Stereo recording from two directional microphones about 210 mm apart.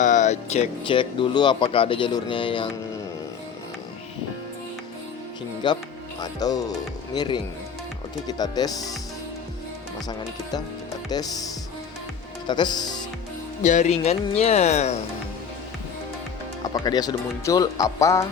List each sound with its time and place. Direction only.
0.0 s speech: 35° left (ahead or behind)
5.6 s speech: 20° left (ahead or behind)
11.1 s speech: 20° left (ahead or behind)
12.5 s speech: 20° left (ahead or behind)
13.6 s speech: 35° left (ahead or behind)
16.6 s speech: 20° left (ahead or behind)